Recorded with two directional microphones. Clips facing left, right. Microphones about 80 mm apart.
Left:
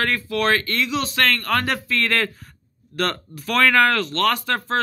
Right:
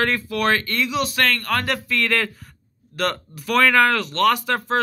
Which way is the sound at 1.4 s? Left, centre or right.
Centre.